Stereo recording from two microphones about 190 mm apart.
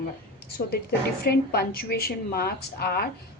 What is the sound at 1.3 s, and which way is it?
A woman's voice, 55° left (ahead or behind).